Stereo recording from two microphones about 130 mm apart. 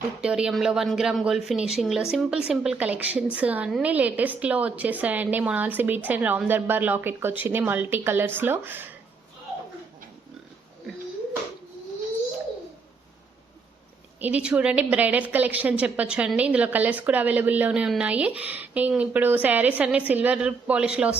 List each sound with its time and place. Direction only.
0.2 s a woman's voice: 5° right (ahead or behind)
14.2 s a woman's voice: 10° right (ahead or behind)